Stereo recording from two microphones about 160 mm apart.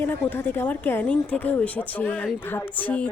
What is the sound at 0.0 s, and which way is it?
A woman's voice, 15° left (ahead or behind).